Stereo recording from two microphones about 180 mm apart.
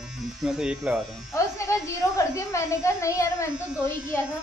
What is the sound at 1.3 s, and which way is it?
A woman's voice, 15° left (ahead or behind).